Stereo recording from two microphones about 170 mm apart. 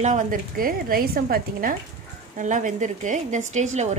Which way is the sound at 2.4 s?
45° right (ahead or behind).